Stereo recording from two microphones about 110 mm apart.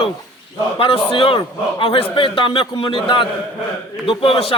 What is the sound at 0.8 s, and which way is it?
A man's voice, 55° left (ahead or behind).